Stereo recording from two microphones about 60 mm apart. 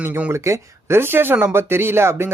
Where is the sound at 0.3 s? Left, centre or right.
Right.